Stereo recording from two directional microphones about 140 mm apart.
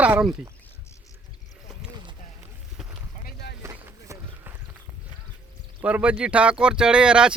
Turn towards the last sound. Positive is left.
turn(degrees=-5)  # may be behind; listen again after turning